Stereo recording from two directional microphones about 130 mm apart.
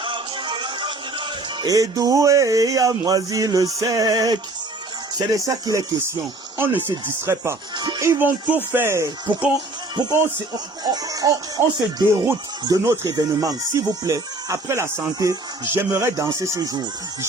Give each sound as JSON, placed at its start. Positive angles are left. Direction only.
{"t": 0.0, "sound": "speech", "side_deg": -40}
{"t": 6.6, "sound": "speech", "side_deg": -15}
{"t": 7.8, "sound": "music", "side_deg": -35}
{"t": 8.0, "sound": "speech", "side_deg": -15}
{"t": 9.9, "sound": "speech", "side_deg": -30}